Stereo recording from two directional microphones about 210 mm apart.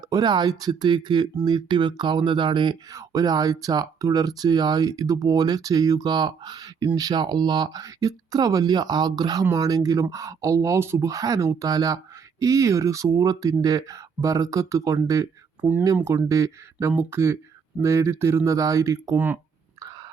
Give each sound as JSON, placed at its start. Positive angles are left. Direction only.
{"t": 0.1, "sound": "speech", "side_deg": -20}